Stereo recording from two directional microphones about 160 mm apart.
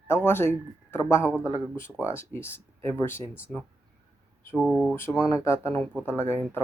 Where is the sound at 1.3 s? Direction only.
10° right (ahead or behind).